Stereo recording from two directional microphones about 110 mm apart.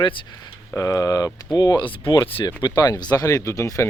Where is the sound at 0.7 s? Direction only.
30° left (ahead or behind).